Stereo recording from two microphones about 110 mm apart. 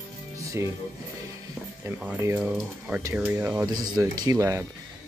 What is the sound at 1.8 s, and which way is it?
Speech, 20° right (ahead or behind).